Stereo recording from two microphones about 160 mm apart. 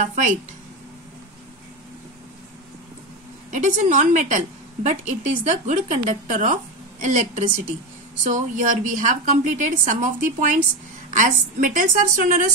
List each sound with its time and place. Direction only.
0.0 s speech: 50° right (ahead or behind)
3.5 s a woman's voice: 50° right (ahead or behind)